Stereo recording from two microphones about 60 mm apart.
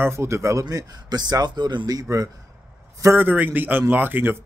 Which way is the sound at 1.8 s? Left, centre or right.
Right.